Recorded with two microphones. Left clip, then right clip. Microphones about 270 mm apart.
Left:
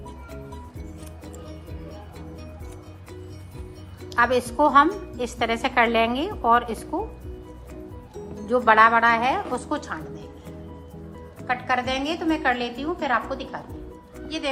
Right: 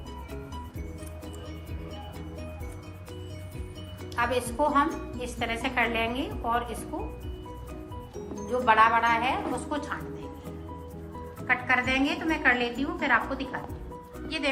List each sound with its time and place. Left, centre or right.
4.1 s speech: left
8.4 s speech: left
11.4 s a woman's voice: centre